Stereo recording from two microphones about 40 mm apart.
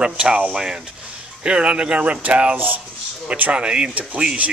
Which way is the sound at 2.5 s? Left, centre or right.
Right.